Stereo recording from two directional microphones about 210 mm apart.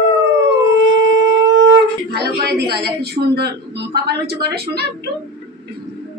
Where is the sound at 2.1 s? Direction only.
50° right (ahead or behind).